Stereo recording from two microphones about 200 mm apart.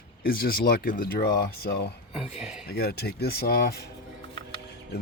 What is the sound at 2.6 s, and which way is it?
Speech, 50° left (ahead or behind).